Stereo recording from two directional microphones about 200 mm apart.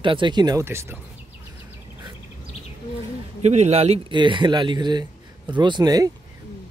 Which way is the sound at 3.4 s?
35° right (ahead or behind).